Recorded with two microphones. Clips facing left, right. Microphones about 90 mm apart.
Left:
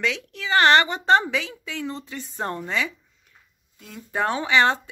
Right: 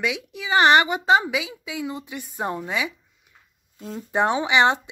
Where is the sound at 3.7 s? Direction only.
35° right (ahead or behind).